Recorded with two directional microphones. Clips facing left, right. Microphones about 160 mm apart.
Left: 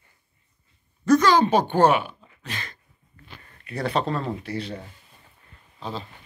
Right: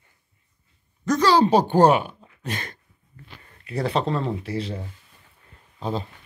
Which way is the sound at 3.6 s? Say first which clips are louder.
Right 1 dB; 25° right (ahead or behind).